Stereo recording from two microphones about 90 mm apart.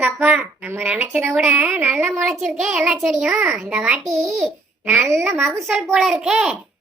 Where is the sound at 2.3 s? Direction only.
5° right (ahead or behind).